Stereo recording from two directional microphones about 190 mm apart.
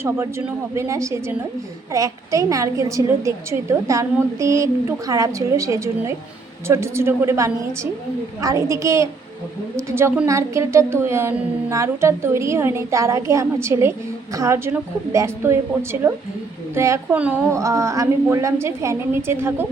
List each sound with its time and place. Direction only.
0.0 s a woman's voice: 15° right (ahead or behind)